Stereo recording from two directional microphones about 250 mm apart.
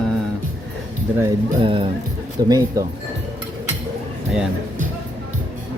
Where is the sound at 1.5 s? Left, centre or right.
Right.